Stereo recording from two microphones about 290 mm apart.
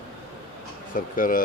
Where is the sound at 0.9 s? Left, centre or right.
Left.